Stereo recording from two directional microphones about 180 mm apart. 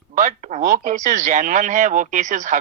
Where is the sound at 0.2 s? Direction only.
45° right (ahead or behind).